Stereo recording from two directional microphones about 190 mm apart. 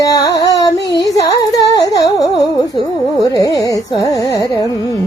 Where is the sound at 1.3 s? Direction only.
20° left (ahead or behind).